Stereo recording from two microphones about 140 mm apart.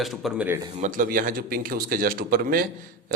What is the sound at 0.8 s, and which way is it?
A man's voice, 70° right (ahead or behind).